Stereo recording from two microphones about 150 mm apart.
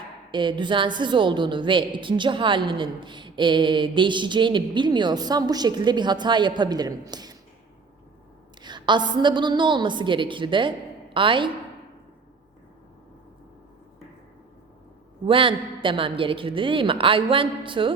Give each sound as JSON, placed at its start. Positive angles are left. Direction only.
{"t": 0.3, "sound": "a woman's voice", "side_deg": -30}
{"t": 8.6, "sound": "a woman's voice", "side_deg": -30}
{"t": 15.3, "sound": "a woman's voice", "side_deg": -35}